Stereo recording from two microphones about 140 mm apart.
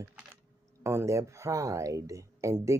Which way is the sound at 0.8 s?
20° right (ahead or behind).